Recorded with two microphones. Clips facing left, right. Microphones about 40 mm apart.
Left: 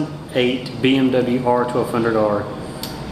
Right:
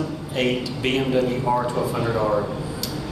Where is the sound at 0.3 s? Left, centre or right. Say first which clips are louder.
Left 4 dB; left.